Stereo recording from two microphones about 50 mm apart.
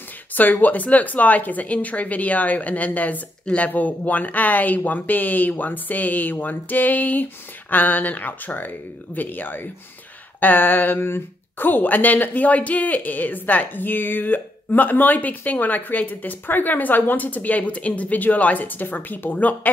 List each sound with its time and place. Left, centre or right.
0.3 s speech: left